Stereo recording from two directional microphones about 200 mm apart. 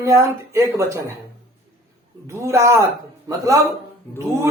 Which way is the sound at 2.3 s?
15° right (ahead or behind).